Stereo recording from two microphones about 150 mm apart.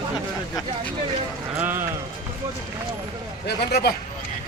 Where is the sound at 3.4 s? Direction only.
90° left.